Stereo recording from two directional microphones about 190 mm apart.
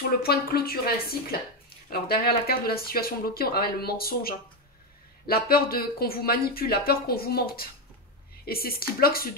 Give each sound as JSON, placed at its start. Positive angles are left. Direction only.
{"t": 0.2, "sound": "speech", "side_deg": 55}